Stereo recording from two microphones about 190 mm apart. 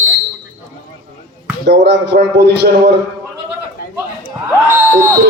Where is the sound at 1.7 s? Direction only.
65° right (ahead or behind).